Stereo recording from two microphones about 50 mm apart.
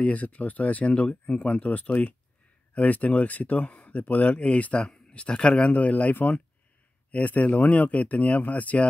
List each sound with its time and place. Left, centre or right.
0.0 s speech: left